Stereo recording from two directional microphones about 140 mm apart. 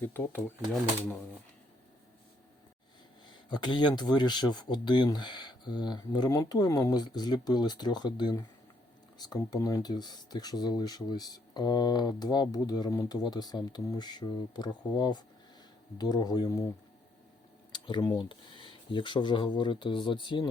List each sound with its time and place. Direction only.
0.1 s speech: 15° left (ahead or behind)
3.2 s speech: 30° left (ahead or behind)
17.7 s typing: 35° left (ahead or behind)
18.3 s speech: 35° left (ahead or behind)